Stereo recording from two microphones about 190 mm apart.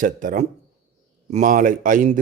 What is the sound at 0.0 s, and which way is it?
Speech, 45° right (ahead or behind).